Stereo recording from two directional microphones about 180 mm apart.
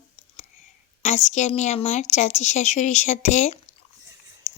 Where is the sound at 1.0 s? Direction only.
40° left (ahead or behind).